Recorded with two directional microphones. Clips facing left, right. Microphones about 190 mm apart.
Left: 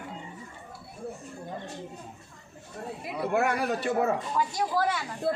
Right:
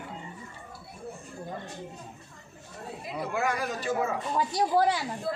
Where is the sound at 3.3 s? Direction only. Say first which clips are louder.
Left 4 dB; 65° left (ahead or behind).